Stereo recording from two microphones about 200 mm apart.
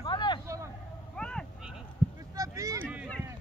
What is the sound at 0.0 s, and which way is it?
Vehicle, 20° left (ahead or behind).